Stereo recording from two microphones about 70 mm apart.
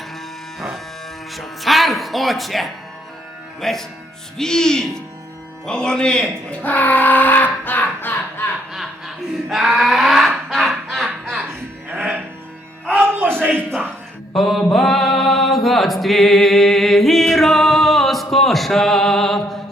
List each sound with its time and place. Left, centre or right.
1.3 s speech: centre; by 8.4 s left
8.7 s a sound: centre
11.9 s music: right
13.0 s a sound: right
13.5 s a man's voice: centre
14.3 s chant: centre